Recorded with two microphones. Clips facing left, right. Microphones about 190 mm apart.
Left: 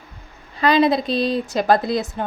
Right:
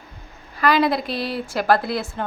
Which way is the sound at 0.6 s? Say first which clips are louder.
Left 3 dB; 20° left (ahead or behind).